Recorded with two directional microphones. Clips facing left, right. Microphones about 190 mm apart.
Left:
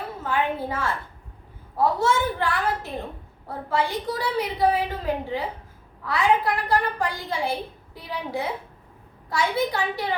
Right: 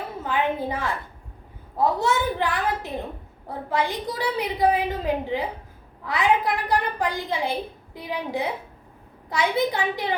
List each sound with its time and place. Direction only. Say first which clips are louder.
0.2 s a woman's voice: right 1 dB; 15° right (ahead or behind)